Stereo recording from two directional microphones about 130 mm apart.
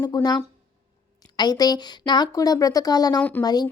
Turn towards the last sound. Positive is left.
turn(degrees=30)  # may be behind; listen again after turning